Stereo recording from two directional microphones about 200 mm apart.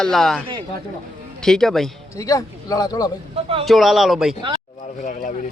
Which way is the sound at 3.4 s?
30° right (ahead or behind).